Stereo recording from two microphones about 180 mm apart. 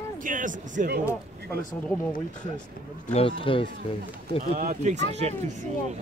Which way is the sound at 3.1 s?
30° left (ahead or behind).